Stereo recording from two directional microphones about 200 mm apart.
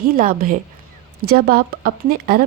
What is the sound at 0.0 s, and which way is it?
A woman's voice, 45° right (ahead or behind).